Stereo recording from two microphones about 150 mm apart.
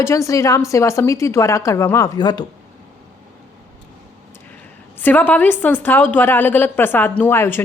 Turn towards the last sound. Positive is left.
turn(degrees=15)  # may be behind; listen again after turning